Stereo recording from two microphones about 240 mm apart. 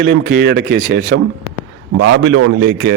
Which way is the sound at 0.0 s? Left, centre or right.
Right.